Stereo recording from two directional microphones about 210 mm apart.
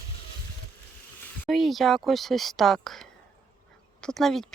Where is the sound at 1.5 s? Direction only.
Centre (ahead or behind).